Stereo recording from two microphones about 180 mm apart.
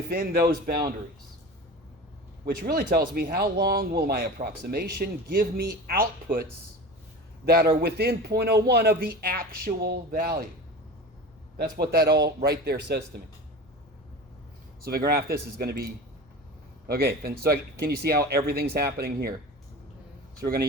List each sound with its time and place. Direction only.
0.1 s speech: 60° right (ahead or behind)
2.4 s speech: 60° right (ahead or behind)
11.5 s speech: 60° right (ahead or behind)
14.8 s speech: 60° right (ahead or behind)
20.4 s speech: 60° right (ahead or behind)